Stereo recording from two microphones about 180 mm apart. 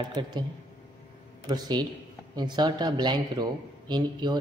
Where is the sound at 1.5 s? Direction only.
25° right (ahead or behind).